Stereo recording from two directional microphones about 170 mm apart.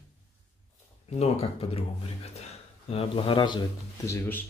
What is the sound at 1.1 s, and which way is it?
Speech, 40° left (ahead or behind).